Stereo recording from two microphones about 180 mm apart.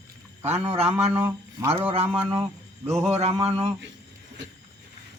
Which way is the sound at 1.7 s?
30° right (ahead or behind).